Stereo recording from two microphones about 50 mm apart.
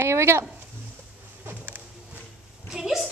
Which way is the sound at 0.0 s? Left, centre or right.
Right.